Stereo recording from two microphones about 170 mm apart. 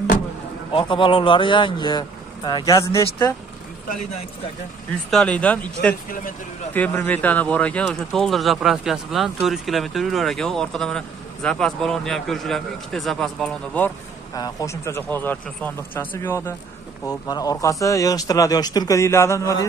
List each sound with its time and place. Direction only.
0.7 s speech: 30° left (ahead or behind)
5.1 s speech: 5° left (ahead or behind)
14.3 s speech: 20° left (ahead or behind)